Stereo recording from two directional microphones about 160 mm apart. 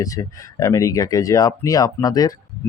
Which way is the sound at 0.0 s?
20° left (ahead or behind).